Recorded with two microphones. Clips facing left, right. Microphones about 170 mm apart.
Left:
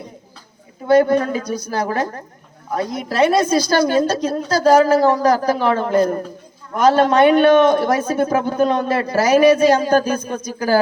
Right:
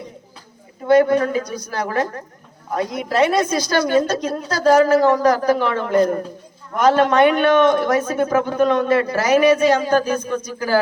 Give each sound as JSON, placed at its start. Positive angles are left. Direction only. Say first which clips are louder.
{"t": 0.9, "sound": "a man's voice", "louder": "even", "side_deg": 35}